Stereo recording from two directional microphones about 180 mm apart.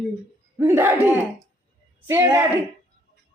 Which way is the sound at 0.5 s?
15° right (ahead or behind).